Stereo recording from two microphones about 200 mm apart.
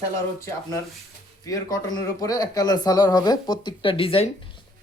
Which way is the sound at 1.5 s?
15° left (ahead or behind).